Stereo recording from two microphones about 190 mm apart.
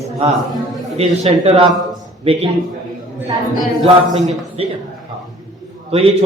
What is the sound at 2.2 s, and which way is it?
Speech, 30° right (ahead or behind).